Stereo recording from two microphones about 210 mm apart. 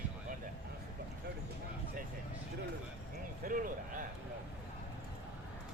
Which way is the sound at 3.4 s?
40° right (ahead or behind).